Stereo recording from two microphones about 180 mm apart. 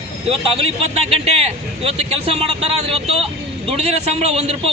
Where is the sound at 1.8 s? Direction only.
35° right (ahead or behind).